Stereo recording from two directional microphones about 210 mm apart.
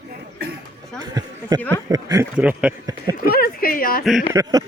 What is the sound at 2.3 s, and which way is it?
Speech, 5° right (ahead or behind).